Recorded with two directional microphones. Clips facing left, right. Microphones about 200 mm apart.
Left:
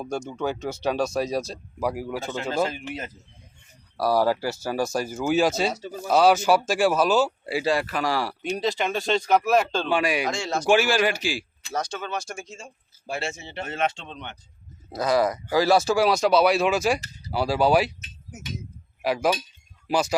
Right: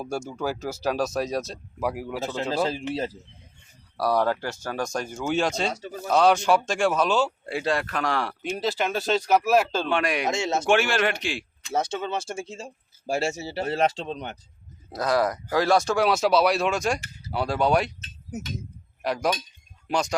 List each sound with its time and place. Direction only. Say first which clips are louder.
0.0 s speech: left 1 dB; 5° right (ahead or behind)
2.9 s speech: right 6 dB; 30° right (ahead or behind)
3.9 s speech: left 2 dB; 5° left (ahead or behind)
10.2 s speech: right 2 dB; 25° right (ahead or behind)
10.7 s speech: left 3 dB; centre (ahead or behind)
11.7 s speech: right 3 dB; 25° right (ahead or behind)
14.8 s speech: left 1 dB; centre (ahead or behind)
19.0 s speech: left 2 dB; 5° left (ahead or behind)